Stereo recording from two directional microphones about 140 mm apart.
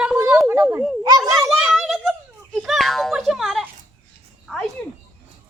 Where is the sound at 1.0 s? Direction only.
25° right (ahead or behind).